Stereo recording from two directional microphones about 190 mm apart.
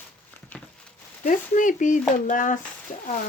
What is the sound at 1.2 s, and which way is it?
Speech, 45° left (ahead or behind).